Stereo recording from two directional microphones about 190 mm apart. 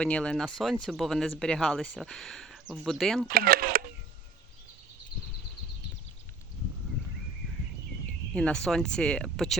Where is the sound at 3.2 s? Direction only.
50° right (ahead or behind).